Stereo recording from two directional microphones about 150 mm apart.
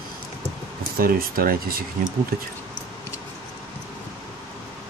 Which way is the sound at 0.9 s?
75° right (ahead or behind).